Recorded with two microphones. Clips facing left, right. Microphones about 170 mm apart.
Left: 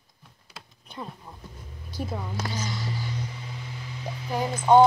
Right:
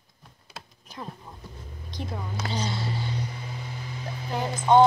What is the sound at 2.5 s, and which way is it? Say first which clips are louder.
Speech: right 2 dB; 30° right (ahead or behind).